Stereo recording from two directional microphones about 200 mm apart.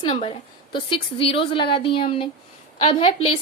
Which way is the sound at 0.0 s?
30° left (ahead or behind).